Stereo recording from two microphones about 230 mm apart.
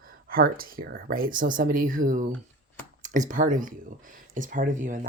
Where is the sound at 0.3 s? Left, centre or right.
Right.